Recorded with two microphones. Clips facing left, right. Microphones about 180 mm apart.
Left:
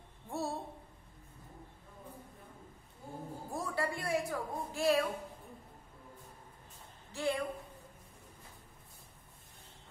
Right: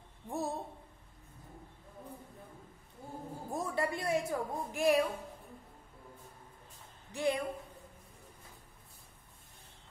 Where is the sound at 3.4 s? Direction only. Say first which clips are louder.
Right 2 dB; 20° right (ahead or behind).